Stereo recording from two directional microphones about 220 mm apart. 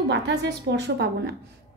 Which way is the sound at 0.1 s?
50° right (ahead or behind).